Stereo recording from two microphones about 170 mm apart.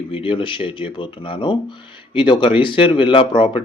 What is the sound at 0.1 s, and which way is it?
Speech, 30° left (ahead or behind).